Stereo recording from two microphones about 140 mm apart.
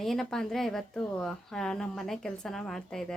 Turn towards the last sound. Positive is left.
turn(degrees=5)  # may be behind; listen again after turning